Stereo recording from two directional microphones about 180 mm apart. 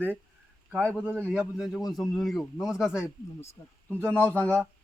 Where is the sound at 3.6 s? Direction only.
20° left (ahead or behind).